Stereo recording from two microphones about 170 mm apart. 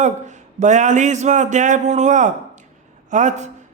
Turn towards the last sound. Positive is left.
turn(degrees=-45)  # may be behind; listen again after turning